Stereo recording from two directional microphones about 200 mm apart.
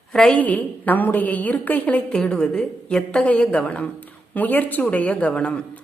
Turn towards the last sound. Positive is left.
turn(degrees=5)  # may be behind; listen again after turning